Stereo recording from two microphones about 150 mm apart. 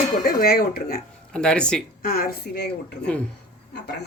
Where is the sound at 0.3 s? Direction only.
85° left.